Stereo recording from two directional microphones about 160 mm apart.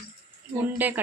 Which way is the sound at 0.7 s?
10° right (ahead or behind).